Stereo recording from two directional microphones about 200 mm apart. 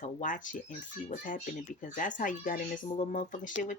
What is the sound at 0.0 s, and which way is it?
Speech, 40° left (ahead or behind).